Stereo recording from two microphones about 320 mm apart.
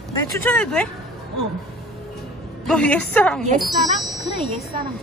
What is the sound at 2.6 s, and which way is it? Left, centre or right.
A woman's voice, centre.